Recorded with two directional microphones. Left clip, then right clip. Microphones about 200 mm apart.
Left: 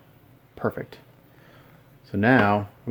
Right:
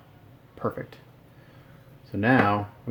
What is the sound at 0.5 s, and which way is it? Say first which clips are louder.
Speech: left 2 dB; 40° left (ahead or behind).